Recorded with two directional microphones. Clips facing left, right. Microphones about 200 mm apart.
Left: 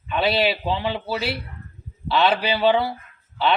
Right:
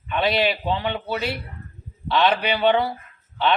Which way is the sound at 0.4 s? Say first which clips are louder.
Even; 5° left (ahead or behind).